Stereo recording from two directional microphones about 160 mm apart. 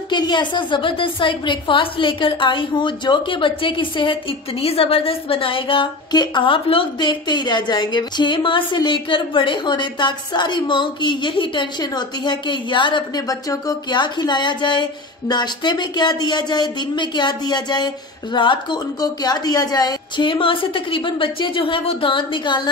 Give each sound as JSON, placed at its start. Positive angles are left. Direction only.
{"t": 0.1, "sound": "a woman's voice", "side_deg": 30}